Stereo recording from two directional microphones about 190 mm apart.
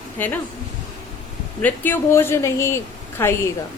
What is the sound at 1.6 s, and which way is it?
A woman's voice, 10° left (ahead or behind).